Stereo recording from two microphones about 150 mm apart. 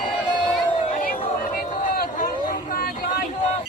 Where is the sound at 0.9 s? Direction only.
65° left (ahead or behind).